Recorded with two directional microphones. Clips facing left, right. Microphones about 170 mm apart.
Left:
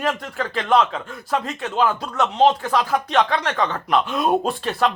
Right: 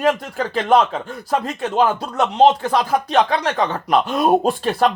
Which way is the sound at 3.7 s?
35° right (ahead or behind).